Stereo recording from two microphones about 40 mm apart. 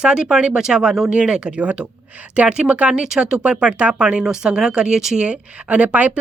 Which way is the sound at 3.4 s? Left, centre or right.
Right.